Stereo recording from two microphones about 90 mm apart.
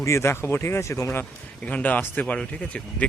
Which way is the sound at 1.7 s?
15° left (ahead or behind).